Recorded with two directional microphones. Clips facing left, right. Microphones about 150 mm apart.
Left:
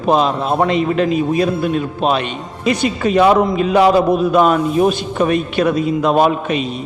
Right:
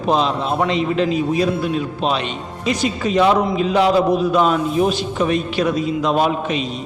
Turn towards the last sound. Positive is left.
turn(degrees=55)  # may be behind; listen again after turning